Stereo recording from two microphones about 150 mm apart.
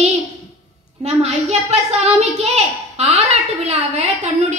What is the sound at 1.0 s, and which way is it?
A child's voice, 45° right (ahead or behind).